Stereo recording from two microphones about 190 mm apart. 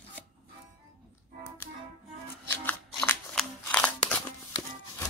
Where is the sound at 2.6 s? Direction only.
10° left (ahead or behind).